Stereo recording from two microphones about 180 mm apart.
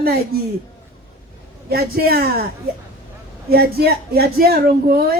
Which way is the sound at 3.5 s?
60° right (ahead or behind).